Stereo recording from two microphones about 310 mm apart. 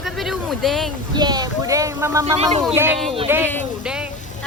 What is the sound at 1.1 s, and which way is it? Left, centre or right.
Speech, centre.